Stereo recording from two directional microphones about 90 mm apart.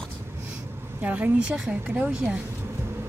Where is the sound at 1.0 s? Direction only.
15° right (ahead or behind).